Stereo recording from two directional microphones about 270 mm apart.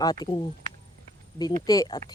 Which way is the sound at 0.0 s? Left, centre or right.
Centre.